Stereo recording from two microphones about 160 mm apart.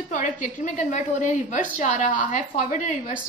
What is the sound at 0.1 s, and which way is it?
A woman's voice, 55° left (ahead or behind).